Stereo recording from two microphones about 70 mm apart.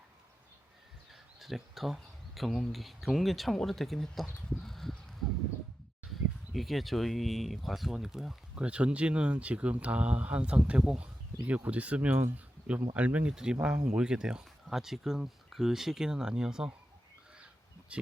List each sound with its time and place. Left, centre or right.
1.4 s speech: centre
6.1 s speech: centre
8.5 s speech: centre